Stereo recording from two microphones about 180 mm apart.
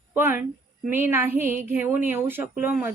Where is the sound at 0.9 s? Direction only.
10° right (ahead or behind).